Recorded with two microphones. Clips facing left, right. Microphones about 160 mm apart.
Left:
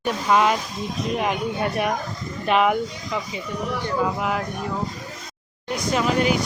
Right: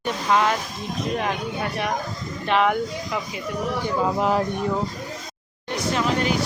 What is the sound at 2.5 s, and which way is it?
Speech, 5° left (ahead or behind).